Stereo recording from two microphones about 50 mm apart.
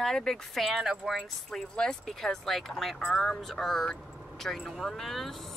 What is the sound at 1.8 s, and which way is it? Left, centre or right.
Speech, centre.